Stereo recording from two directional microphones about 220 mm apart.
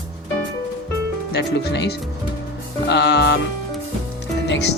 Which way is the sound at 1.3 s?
50° left (ahead or behind).